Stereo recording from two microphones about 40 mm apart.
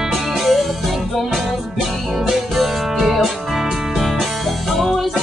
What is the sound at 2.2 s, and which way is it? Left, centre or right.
Music, centre.